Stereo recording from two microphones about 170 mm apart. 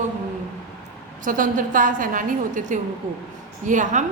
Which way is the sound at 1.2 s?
50° right (ahead or behind).